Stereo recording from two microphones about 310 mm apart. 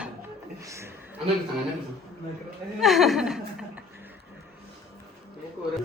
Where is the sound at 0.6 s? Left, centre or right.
Centre.